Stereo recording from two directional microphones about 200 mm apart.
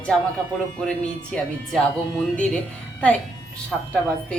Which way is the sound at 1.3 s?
5° left (ahead or behind).